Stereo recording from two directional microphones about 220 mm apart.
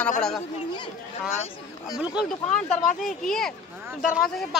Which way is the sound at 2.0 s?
5° right (ahead or behind).